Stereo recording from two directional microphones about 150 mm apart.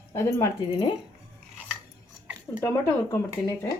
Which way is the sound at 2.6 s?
20° left (ahead or behind).